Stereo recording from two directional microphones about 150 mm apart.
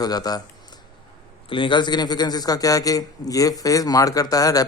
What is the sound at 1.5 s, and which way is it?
A man's voice, 35° left (ahead or behind).